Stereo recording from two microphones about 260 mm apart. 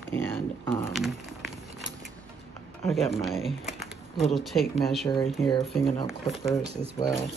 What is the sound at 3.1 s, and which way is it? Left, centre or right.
Speech, centre.